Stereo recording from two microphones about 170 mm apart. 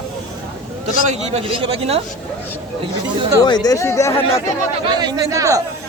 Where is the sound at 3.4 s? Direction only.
25° left (ahead or behind).